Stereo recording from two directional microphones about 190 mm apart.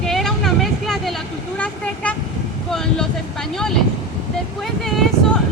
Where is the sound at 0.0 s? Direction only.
Centre (ahead or behind).